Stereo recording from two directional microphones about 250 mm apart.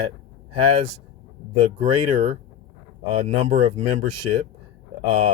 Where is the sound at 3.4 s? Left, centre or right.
Right.